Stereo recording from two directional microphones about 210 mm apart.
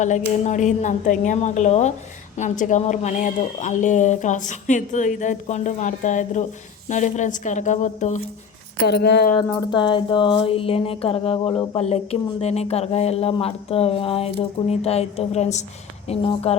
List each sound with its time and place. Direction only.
0.0 s speech: 35° left (ahead or behind)
8.9 s speech: 50° left (ahead or behind)
9.7 s speech: 20° left (ahead or behind)